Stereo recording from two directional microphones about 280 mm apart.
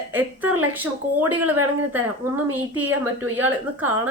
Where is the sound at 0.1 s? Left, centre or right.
Centre.